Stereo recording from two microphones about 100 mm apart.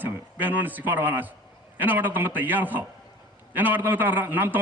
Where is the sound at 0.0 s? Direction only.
20° right (ahead or behind).